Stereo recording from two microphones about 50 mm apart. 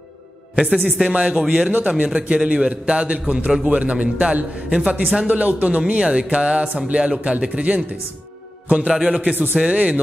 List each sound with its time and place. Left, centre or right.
0.6 s speech: right
1.3 s speech: centre
1.7 s a man's voice: right
5.9 s a man's voice: centre
9.3 s speech: right
9.6 s speech: right